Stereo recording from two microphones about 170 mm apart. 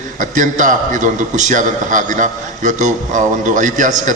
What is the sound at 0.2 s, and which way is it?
A man's voice, 50° right (ahead or behind).